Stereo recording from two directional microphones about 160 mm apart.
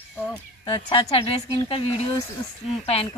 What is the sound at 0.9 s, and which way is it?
Speech, 35° left (ahead or behind).